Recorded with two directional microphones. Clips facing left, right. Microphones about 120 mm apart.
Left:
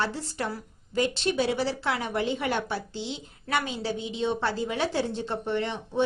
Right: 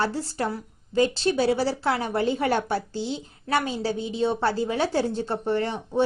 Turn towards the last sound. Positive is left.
turn(degrees=-40)  # may be behind; listen again after turning